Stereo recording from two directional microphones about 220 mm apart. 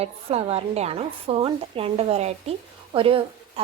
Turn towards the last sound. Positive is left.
turn(degrees=-25)  # may be behind; listen again after turning